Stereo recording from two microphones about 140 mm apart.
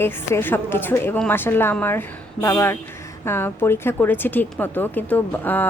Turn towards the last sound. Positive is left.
turn(degrees=15)  # may be behind; listen again after turning